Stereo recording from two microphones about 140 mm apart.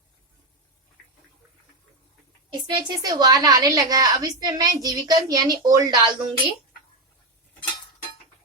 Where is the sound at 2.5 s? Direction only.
30° right (ahead or behind).